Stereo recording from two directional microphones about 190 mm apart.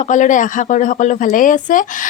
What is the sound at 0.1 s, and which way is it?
A woman's voice, 40° left (ahead or behind).